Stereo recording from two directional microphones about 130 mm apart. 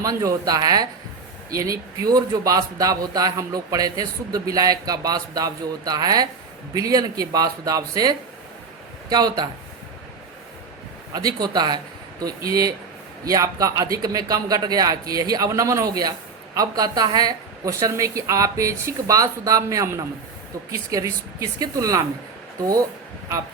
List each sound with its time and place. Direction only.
0.0 s a man's voice: 25° right (ahead or behind)
11.1 s a man's voice: 30° right (ahead or behind)